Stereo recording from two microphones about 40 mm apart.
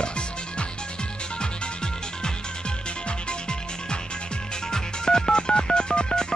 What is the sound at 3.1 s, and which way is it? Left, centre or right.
Music, left.